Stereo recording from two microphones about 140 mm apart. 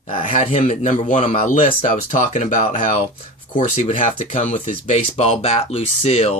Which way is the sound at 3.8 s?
55° left (ahead or behind).